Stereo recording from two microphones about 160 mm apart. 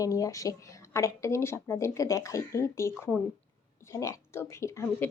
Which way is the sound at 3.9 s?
20° left (ahead or behind).